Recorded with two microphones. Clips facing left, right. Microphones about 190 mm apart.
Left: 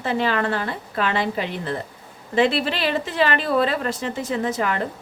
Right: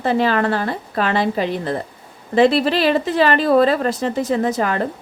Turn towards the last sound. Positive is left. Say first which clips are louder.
# right 5 dB
turn(degrees=-40)  # may be behind; listen again after turning